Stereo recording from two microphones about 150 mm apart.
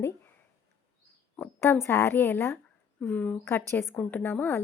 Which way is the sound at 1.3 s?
10° left (ahead or behind).